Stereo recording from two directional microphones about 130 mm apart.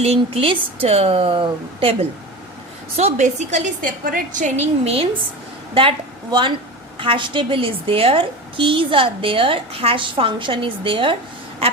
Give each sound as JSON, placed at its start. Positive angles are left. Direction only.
{"t": 0.0, "sound": "a woman's voice", "side_deg": -50}
{"t": 2.9, "sound": "a woman's voice", "side_deg": -60}
{"t": 7.0, "sound": "a woman's voice", "side_deg": -40}